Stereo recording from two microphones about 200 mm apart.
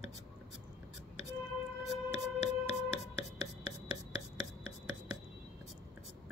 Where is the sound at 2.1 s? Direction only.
30° left (ahead or behind).